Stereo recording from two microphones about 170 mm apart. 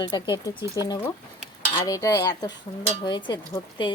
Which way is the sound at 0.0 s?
25° left (ahead or behind).